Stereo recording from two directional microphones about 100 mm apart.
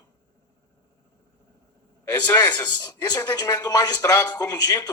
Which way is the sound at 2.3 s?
45° left (ahead or behind).